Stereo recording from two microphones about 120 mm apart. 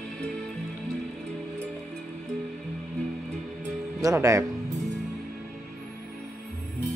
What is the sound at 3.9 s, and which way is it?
Speech, 25° right (ahead or behind).